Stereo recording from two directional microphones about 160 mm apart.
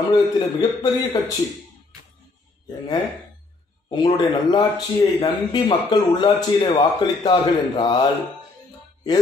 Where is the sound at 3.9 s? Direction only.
30° left (ahead or behind).